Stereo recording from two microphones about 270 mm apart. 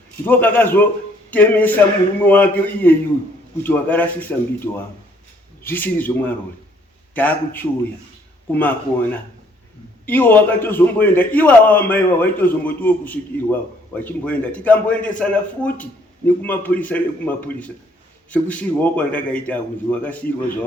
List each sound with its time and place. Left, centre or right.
0.3 s a man's voice: centre